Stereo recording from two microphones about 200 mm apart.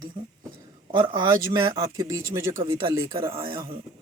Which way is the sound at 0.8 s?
25° right (ahead or behind).